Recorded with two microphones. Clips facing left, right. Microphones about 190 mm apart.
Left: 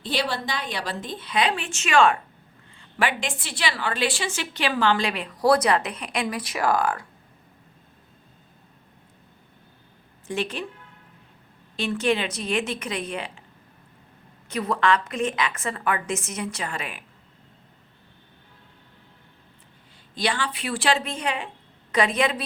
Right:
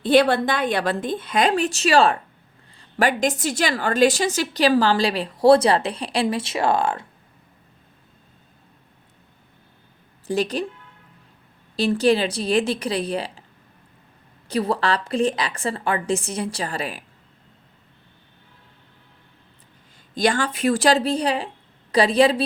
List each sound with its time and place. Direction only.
0.0 s a woman's voice: 55° right (ahead or behind); by 7.0 s 25° right (ahead or behind)
10.2 s a woman's voice: 40° right (ahead or behind)
11.8 s a woman's voice: 35° right (ahead or behind)
14.4 s a woman's voice: 30° right (ahead or behind)
20.1 s a woman's voice: 45° right (ahead or behind)